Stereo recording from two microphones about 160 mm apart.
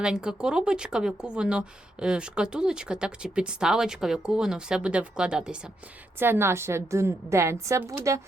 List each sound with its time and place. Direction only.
0.0 s a woman's voice: 5° right (ahead or behind)